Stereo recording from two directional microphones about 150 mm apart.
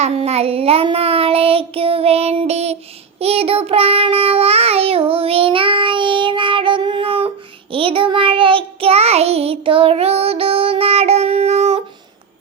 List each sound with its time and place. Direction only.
0.0 s child singing: 40° right (ahead or behind)